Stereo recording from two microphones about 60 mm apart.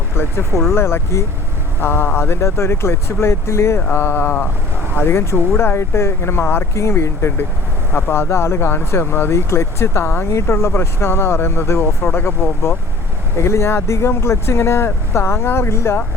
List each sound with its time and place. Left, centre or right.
0.1 s speech: left
3.9 s speech: left
7.9 s speech: left
13.4 s speech: left